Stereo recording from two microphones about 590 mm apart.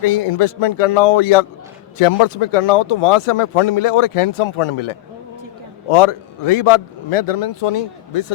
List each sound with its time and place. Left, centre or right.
0.0 s speech: left